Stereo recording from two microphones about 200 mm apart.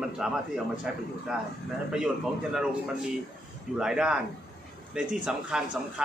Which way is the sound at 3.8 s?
5° right (ahead or behind).